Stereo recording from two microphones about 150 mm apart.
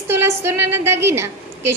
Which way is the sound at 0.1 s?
15° right (ahead or behind).